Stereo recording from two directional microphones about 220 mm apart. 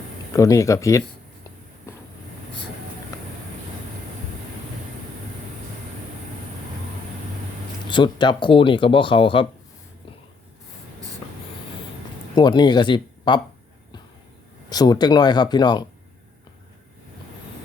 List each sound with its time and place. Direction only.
0.3 s speech: 15° left (ahead or behind)
7.9 s speech: 20° left (ahead or behind)
12.3 s speech: 20° left (ahead or behind)
14.7 s speech: 20° left (ahead or behind)